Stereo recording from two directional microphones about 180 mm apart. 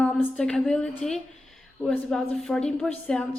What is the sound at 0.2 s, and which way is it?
Speech, 5° left (ahead or behind).